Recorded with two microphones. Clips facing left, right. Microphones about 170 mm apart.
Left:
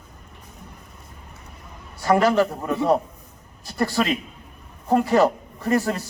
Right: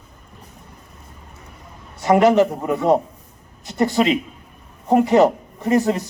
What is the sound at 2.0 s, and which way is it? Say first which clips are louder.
A man's voice: right 4 dB; 20° right (ahead or behind).